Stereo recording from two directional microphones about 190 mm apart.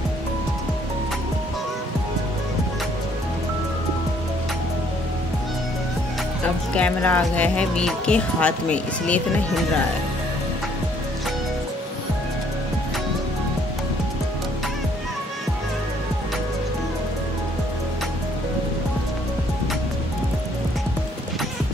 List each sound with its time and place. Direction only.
6.4 s speech: 5° left (ahead or behind)